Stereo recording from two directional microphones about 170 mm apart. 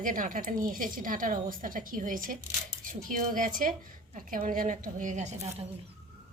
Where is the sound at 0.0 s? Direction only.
50° right (ahead or behind).